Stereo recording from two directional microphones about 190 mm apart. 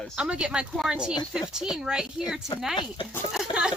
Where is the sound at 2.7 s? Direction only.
25° left (ahead or behind).